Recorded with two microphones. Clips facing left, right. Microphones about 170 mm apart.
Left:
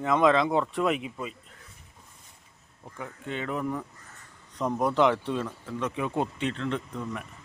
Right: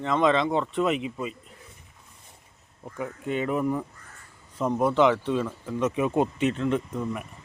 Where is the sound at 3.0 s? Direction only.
15° right (ahead or behind).